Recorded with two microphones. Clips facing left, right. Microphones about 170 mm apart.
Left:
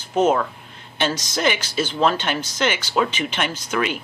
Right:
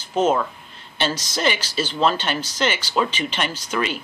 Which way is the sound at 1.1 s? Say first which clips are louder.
Left 1 dB; 10° right (ahead or behind).